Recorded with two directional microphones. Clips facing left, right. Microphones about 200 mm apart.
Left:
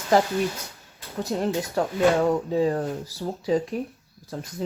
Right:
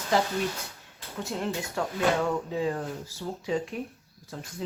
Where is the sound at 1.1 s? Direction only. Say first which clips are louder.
Left 6 dB; 40° left (ahead or behind).